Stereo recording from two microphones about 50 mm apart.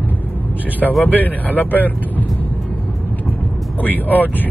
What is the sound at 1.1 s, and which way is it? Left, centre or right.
Speech, left.